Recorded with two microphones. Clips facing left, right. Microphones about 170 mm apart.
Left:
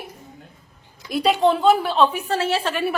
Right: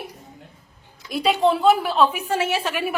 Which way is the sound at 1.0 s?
Centre (ahead or behind).